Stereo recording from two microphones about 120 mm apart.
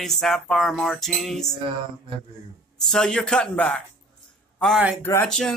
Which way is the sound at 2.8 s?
5° left (ahead or behind).